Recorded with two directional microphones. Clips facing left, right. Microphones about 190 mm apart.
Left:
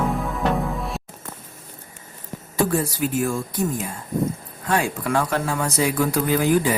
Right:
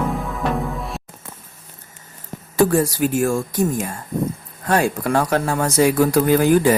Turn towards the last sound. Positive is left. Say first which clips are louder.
# right 5 dB
turn(degrees=-50)  # may be behind; listen again after turning